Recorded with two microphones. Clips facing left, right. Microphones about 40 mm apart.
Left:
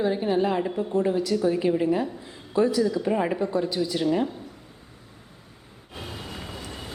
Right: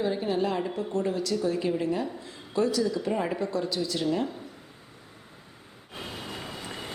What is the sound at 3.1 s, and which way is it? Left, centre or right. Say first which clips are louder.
A woman's voice: left 4 dB; left.